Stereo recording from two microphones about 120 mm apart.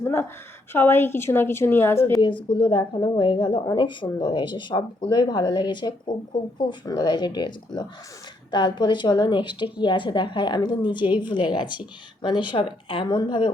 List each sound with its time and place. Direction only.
0.0 s a woman's voice: 20° left (ahead or behind)
2.2 s speech: 40° left (ahead or behind)